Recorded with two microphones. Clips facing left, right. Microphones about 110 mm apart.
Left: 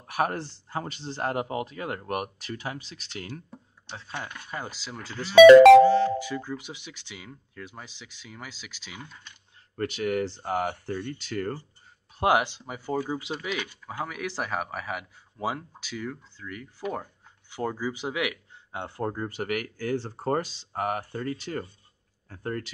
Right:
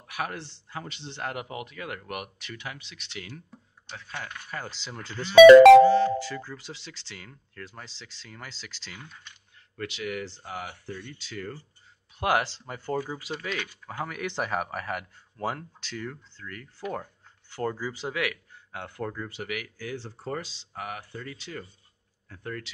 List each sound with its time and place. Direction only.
0.0 s speech: 40° left (ahead or behind)
3.9 s speech: 25° left (ahead or behind); by 5.3 s 5° left (ahead or behind)
6.1 s speech: 15° left (ahead or behind)
9.8 s speech: 45° left (ahead or behind)
12.2 s speech: 20° left (ahead or behind); by 22.7 s 40° left (ahead or behind)